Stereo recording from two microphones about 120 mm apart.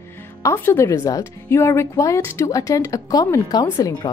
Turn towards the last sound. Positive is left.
turn(degrees=35)  # may be behind; listen again after turning